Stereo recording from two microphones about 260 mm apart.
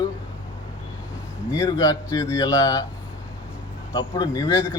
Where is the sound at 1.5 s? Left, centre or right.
Centre.